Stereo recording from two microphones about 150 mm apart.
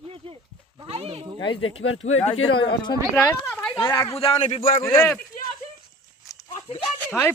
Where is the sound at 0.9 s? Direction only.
40° right (ahead or behind).